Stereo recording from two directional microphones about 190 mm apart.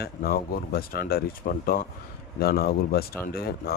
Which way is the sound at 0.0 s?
50° left (ahead or behind).